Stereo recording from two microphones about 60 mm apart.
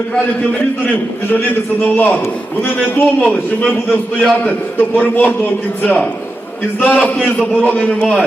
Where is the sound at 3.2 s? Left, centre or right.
Centre.